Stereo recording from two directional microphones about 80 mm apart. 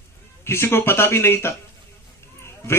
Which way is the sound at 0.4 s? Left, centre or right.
Left.